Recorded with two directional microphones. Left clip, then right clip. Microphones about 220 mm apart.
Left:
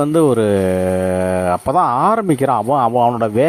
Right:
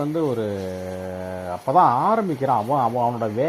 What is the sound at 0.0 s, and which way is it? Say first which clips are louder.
Speech: left 10 dB; 35° left (ahead or behind).